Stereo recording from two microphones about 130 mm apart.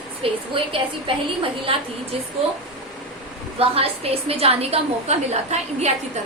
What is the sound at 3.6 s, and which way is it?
A woman's voice, 50° right (ahead or behind).